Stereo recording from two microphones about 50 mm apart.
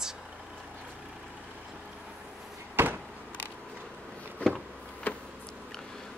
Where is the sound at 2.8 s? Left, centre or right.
Right.